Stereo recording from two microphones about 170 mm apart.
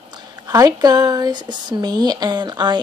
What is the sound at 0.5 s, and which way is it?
Speech, 25° right (ahead or behind).